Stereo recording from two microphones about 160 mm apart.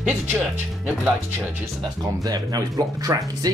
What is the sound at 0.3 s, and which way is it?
Speech, 10° right (ahead or behind).